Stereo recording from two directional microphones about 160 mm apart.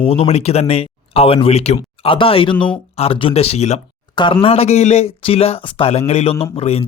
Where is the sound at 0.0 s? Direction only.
35° left (ahead or behind).